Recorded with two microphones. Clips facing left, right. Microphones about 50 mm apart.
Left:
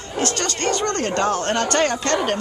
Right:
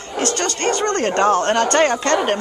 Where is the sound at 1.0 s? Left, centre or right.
Right.